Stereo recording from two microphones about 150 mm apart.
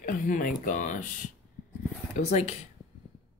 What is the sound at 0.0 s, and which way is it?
Speech, 65° left (ahead or behind).